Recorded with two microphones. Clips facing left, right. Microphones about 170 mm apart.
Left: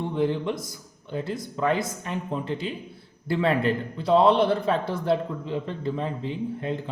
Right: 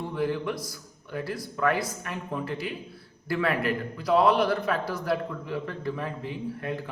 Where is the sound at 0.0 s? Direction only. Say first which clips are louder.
Left 3 dB; 20° left (ahead or behind).